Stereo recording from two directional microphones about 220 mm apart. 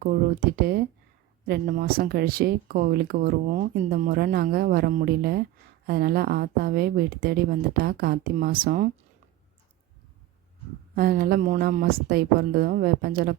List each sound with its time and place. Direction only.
0.0 s speech: 40° right (ahead or behind)
10.9 s speech: 45° right (ahead or behind)